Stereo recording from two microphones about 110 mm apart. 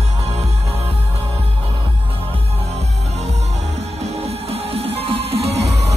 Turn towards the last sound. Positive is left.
turn(degrees=-85)